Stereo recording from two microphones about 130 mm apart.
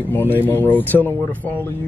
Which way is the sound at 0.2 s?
15° left (ahead or behind).